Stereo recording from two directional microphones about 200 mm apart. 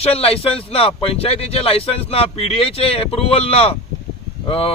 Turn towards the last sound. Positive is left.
turn(degrees=30)  # may be behind; listen again after turning